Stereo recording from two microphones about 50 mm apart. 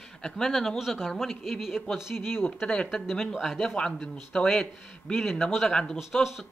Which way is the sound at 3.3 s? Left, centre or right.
Centre.